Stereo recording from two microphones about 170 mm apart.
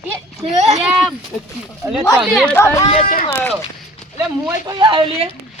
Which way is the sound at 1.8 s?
15° right (ahead or behind).